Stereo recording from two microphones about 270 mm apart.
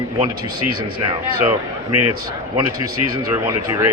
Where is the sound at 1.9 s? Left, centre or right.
Right.